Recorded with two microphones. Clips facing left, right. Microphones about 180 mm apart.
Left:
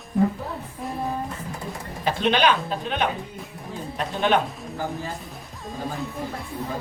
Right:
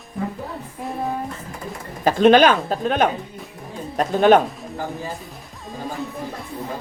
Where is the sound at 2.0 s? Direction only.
45° right (ahead or behind).